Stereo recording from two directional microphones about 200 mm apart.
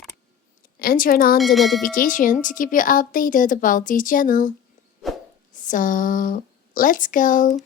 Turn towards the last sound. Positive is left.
turn(degrees=40)  # may be behind; listen again after turning